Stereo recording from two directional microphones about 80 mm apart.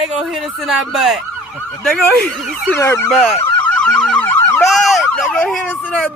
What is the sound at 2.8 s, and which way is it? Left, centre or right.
Speech, left.